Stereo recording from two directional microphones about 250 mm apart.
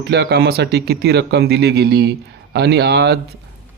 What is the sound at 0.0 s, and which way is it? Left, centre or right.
Speech, right.